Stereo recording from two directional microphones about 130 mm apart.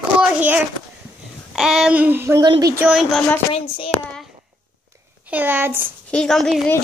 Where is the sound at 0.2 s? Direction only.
10° right (ahead or behind).